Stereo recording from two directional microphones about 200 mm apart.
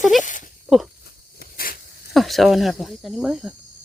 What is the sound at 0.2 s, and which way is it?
Speech, 40° left (ahead or behind).